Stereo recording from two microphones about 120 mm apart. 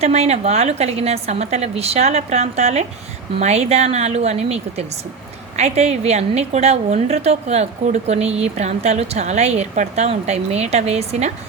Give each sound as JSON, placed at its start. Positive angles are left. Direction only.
{"t": 0.0, "sound": "a woman's voice", "side_deg": -60}